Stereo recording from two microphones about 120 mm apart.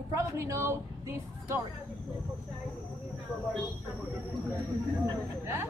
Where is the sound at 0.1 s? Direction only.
25° right (ahead or behind).